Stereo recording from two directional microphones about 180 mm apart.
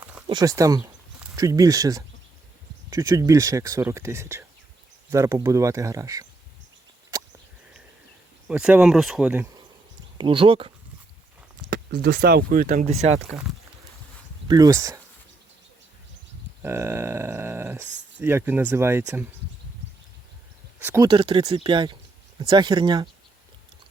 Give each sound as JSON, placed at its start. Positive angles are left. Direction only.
{"t": 0.3, "sound": "speech", "side_deg": -20}
{"t": 7.1, "sound": "a sound", "side_deg": -15}
{"t": 8.4, "sound": "speech", "side_deg": -5}
{"t": 10.2, "sound": "speech", "side_deg": -30}
{"t": 11.7, "sound": "speech", "side_deg": -60}
{"t": 12.9, "sound": "speech", "side_deg": -35}
{"t": 14.4, "sound": "speech", "side_deg": -20}
{"t": 16.6, "sound": "speech", "side_deg": -15}
{"t": 20.7, "sound": "speech", "side_deg": -15}
{"t": 21.1, "sound": "speech", "side_deg": -25}